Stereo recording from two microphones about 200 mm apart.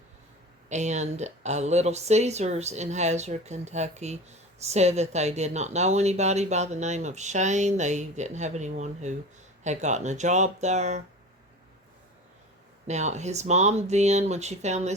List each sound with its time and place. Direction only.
0.7 s speech: 35° right (ahead or behind)
12.9 s speech: 35° right (ahead or behind)